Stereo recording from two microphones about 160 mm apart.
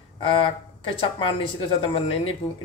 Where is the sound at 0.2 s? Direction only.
35° left (ahead or behind).